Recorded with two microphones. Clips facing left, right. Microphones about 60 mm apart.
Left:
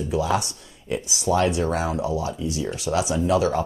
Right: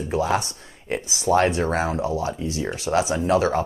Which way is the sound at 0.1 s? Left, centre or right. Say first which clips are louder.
Right 1 dB; right.